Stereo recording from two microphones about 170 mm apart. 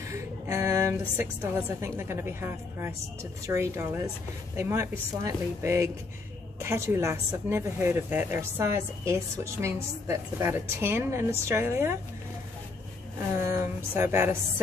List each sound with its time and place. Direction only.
0.0 s a woman's voice: 15° right (ahead or behind)
13.4 s a woman's voice: 15° right (ahead or behind)